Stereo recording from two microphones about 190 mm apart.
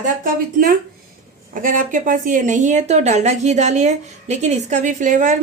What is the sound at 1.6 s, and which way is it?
A woman's voice, 45° right (ahead or behind).